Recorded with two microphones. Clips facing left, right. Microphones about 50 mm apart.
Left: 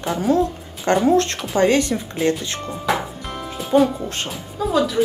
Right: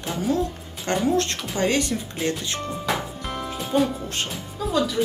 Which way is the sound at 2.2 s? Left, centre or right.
Centre.